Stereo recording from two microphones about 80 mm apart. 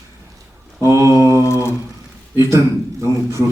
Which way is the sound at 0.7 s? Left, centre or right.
Right.